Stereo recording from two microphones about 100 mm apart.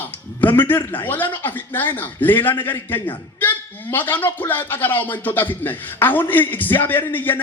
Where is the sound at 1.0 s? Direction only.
20° left (ahead or behind).